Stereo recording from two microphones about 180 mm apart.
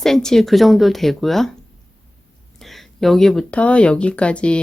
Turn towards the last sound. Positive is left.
turn(degrees=5)  # may be behind; listen again after turning